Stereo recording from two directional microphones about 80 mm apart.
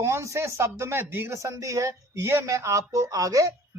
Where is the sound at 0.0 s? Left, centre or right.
Right.